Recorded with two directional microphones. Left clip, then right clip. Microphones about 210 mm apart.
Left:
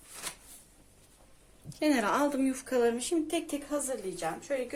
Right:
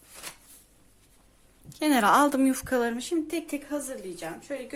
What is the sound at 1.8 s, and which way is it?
A woman's voice, 45° right (ahead or behind).